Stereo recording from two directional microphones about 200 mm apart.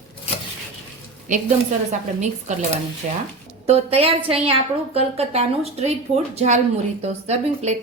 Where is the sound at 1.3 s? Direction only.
40° right (ahead or behind).